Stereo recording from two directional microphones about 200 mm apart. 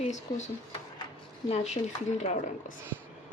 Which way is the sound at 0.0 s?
35° left (ahead or behind).